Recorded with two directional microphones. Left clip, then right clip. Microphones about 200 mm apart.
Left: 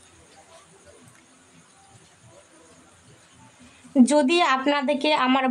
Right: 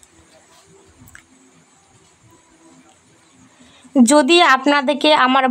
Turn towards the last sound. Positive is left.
turn(degrees=-20)  # may be behind; listen again after turning